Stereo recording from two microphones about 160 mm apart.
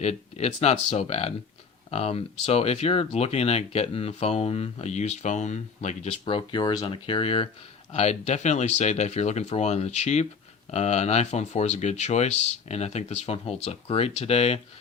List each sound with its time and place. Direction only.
0.0 s speech: 45° left (ahead or behind)
6.2 s speech: 30° left (ahead or behind)